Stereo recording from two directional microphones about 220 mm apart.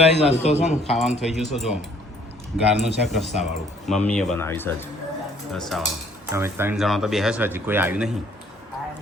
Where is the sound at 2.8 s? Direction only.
Centre (ahead or behind).